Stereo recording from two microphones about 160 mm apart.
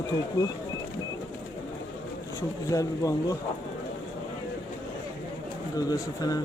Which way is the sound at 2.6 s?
20° left (ahead or behind).